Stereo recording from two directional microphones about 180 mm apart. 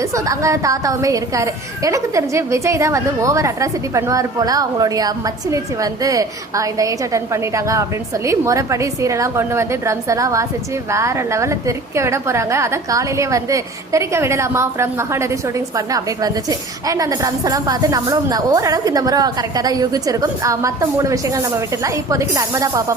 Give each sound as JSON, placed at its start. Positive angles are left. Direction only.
{"t": 0.0, "sound": "a woman's voice", "side_deg": -15}